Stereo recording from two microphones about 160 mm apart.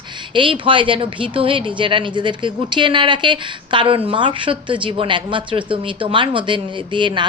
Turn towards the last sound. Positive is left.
turn(degrees=-30)  # may be behind; listen again after turning